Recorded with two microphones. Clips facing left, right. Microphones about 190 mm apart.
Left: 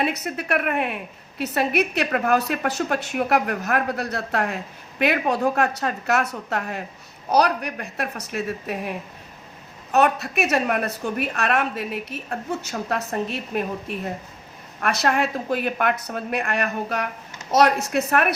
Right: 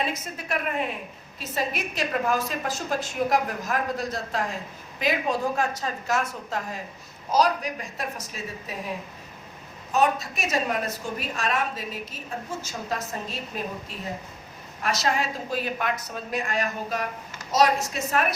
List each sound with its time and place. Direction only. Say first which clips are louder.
0.0 s a woman's voice: left 5 dB; 65° left (ahead or behind)
9.9 s a woman's voice: left 4 dB; 65° left (ahead or behind)